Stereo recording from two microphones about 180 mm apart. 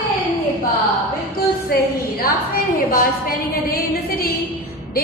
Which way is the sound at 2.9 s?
55° left (ahead or behind).